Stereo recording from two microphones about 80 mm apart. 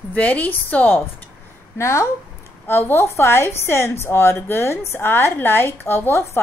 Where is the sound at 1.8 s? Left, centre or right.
Left.